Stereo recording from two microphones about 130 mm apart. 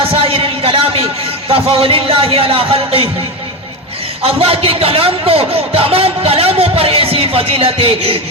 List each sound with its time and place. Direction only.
0.0 s a man's voice: 45° right (ahead or behind)
4.2 s a man's voice: 45° right (ahead or behind)